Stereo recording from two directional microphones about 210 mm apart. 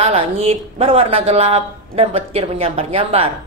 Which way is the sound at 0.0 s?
25° right (ahead or behind).